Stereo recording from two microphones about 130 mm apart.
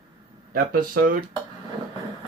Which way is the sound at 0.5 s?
90° right.